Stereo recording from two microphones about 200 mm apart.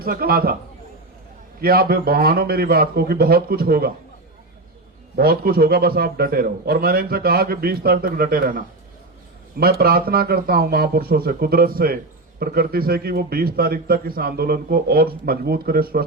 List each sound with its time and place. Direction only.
0.0 s a man's voice: 50° right (ahead or behind)
1.6 s a man's voice: 50° right (ahead or behind)
5.1 s a man's voice: 50° right (ahead or behind)